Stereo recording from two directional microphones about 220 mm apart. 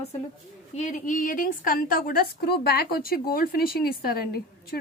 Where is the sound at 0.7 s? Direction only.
35° left (ahead or behind).